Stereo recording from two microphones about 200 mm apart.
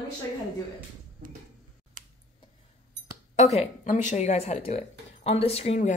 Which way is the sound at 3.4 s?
35° left (ahead or behind).